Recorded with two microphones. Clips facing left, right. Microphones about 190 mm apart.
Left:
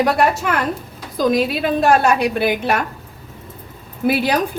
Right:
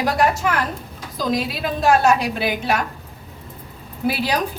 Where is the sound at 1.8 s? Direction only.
60° left (ahead or behind).